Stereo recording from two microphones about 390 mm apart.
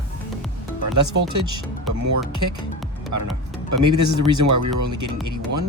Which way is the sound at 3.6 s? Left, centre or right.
Right.